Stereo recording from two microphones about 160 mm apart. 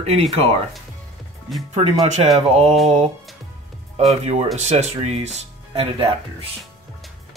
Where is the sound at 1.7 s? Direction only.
45° right (ahead or behind).